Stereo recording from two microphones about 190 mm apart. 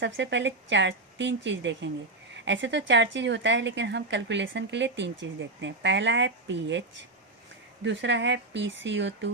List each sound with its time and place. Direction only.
0.0 s speech: 70° right (ahead or behind)
7.9 s speech: 70° right (ahead or behind)